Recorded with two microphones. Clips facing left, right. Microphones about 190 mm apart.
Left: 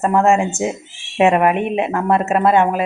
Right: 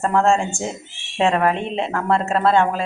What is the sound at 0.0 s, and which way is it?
A woman's voice, 15° left (ahead or behind).